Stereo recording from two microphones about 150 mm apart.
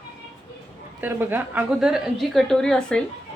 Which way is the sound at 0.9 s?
15° right (ahead or behind).